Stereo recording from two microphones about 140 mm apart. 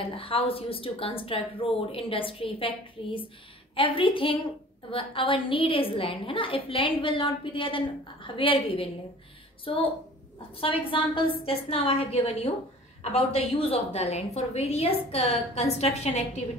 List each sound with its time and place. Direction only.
0.0 s a woman's voice: 40° left (ahead or behind)